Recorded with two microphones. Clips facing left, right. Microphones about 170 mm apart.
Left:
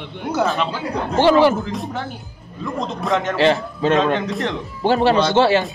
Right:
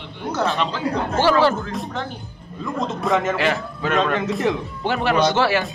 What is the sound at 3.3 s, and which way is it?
Speech, 30° left (ahead or behind).